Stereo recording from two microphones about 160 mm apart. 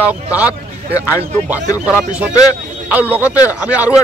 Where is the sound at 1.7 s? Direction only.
5° right (ahead or behind).